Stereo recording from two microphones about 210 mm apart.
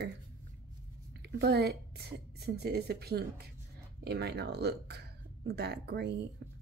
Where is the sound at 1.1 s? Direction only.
55° right (ahead or behind).